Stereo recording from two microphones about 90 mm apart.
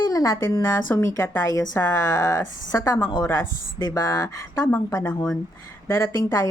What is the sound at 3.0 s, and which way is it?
Speech, 65° left (ahead or behind).